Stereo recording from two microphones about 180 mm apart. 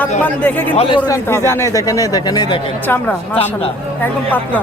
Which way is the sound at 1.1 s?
15° left (ahead or behind).